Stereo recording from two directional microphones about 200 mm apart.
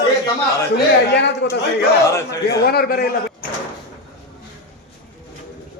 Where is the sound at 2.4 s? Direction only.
50° left (ahead or behind).